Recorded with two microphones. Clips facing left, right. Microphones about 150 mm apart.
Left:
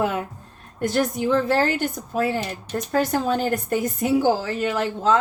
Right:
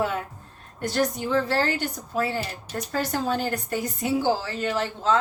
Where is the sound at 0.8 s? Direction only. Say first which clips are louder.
Left 3 dB; 50° left (ahead or behind).